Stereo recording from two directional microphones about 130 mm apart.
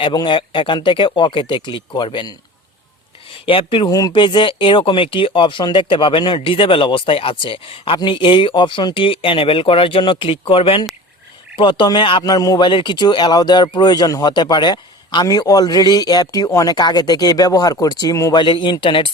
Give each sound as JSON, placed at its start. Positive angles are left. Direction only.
{"t": 0.0, "sound": "speech", "side_deg": 35}
{"t": 3.4, "sound": "speech", "side_deg": 45}
{"t": 3.8, "sound": "speech", "side_deg": 25}
{"t": 4.1, "sound": "speech", "side_deg": 40}
{"t": 18.4, "sound": "speech", "side_deg": 40}